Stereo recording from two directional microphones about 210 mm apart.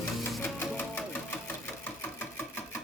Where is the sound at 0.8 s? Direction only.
5° left (ahead or behind).